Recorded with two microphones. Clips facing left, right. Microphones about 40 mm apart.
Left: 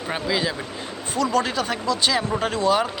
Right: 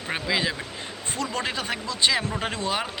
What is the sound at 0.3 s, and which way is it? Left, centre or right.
Speech, right.